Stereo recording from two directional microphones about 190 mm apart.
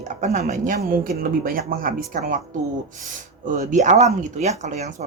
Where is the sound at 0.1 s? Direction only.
40° right (ahead or behind).